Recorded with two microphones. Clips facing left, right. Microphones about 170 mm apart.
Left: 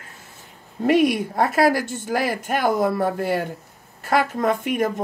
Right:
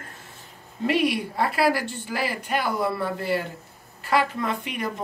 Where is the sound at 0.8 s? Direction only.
45° left (ahead or behind).